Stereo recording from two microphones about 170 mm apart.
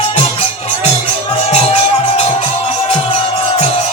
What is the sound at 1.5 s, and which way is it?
Music, 40° left (ahead or behind).